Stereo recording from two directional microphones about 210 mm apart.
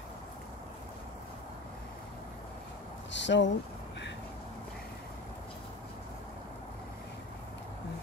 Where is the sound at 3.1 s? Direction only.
60° left (ahead or behind).